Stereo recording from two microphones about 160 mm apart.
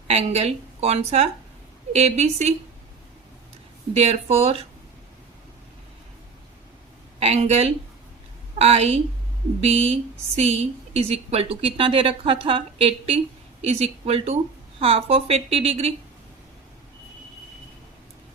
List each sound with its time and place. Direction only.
0.1 s a woman's voice: 40° right (ahead or behind)
3.9 s a woman's voice: 40° right (ahead or behind)
7.2 s a woman's voice: 40° right (ahead or behind)